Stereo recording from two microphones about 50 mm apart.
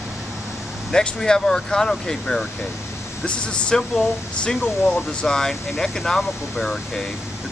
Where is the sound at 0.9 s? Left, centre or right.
Centre.